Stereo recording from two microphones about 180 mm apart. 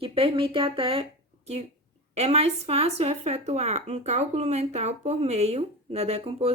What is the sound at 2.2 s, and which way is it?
Speech, 35° right (ahead or behind).